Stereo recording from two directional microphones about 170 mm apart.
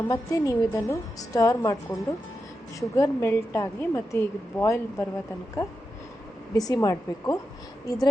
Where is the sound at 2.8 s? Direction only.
20° left (ahead or behind).